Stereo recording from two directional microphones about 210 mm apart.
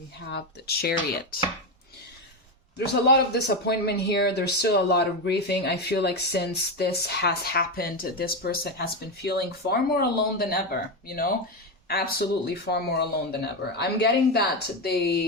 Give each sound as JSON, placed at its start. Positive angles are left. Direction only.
{"t": 0.3, "sound": "speech", "side_deg": 50}
{"t": 2.7, "sound": "speech", "side_deg": 50}